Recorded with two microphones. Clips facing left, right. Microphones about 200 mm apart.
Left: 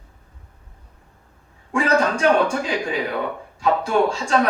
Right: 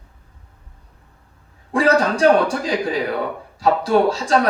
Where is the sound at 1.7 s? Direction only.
35° right (ahead or behind).